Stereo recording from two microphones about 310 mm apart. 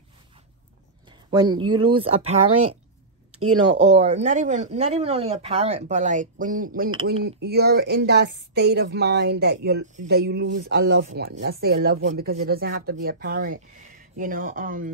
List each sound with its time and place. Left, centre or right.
1.3 s speech: centre
3.3 s speech: right
3.9 s speech: right